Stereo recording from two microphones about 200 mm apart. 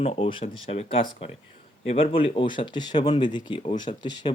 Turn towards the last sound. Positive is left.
turn(degrees=20)  # may be behind; listen again after turning